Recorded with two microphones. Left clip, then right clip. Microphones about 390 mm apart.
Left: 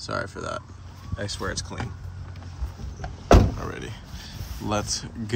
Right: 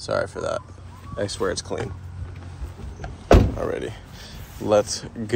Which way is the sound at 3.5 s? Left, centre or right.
Centre.